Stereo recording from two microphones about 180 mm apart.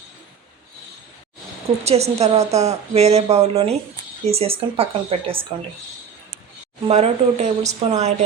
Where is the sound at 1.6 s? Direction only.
35° right (ahead or behind).